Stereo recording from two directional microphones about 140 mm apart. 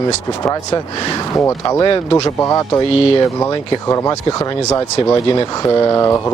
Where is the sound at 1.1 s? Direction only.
20° left (ahead or behind).